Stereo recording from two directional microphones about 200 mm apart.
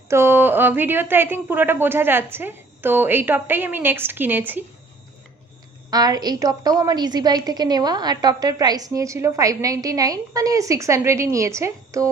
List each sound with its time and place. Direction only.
0.1 s a woman's voice: 10° right (ahead or behind)
5.9 s a woman's voice: 20° right (ahead or behind)